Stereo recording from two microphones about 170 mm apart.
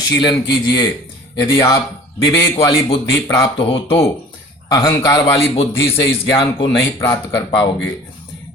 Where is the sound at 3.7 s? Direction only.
35° left (ahead or behind).